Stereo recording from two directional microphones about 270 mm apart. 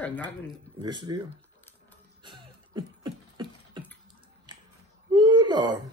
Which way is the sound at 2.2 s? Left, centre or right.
Centre.